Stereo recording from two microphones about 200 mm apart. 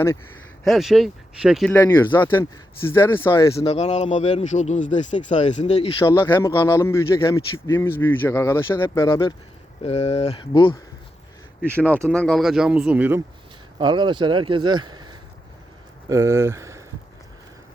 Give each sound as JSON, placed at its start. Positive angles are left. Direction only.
{"t": 0.6, "sound": "speech", "side_deg": 0}
{"t": 1.7, "sound": "a man's voice", "side_deg": 10}
{"t": 3.7, "sound": "speech", "side_deg": 35}
{"t": 6.1, "sound": "a man's voice", "side_deg": 10}
{"t": 9.8, "sound": "speech", "side_deg": 30}
{"t": 12.0, "sound": "speech", "side_deg": 5}
{"t": 13.7, "sound": "speech", "side_deg": -25}